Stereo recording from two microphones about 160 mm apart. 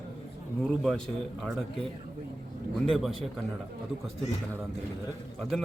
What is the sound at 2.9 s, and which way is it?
Speech, centre (ahead or behind).